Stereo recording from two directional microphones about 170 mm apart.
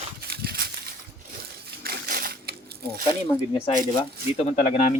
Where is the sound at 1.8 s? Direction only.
65° right (ahead or behind).